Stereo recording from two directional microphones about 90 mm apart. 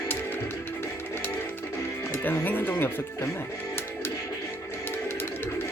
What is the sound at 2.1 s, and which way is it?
Speech, 20° left (ahead or behind).